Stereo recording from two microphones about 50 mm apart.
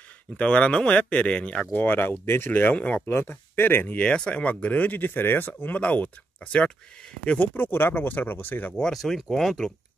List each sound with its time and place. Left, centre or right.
0.4 s speech: left
1.8 s speech: left
2.7 s speech: left
3.1 s speech: left
3.9 s speech: left
5.8 s speech: left
7.3 s speech: left
8.8 s speech: centre